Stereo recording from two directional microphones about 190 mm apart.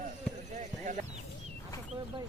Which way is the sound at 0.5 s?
40° right (ahead or behind).